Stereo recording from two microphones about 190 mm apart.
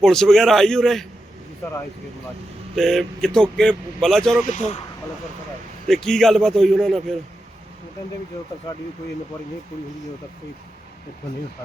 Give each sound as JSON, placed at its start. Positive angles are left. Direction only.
{"t": 0.0, "sound": "speech", "side_deg": 0}
{"t": 2.7, "sound": "speech", "side_deg": 0}
{"t": 4.4, "sound": "speech", "side_deg": 35}
{"t": 5.9, "sound": "speech", "side_deg": 0}